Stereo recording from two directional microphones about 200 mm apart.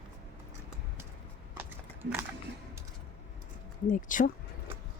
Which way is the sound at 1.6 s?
10° right (ahead or behind).